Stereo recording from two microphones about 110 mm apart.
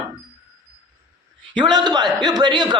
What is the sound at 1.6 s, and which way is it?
A man's voice, 40° right (ahead or behind).